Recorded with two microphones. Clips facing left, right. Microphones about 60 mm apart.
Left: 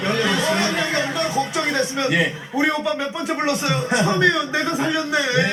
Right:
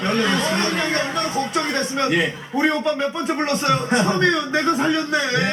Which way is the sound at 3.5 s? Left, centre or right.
Centre.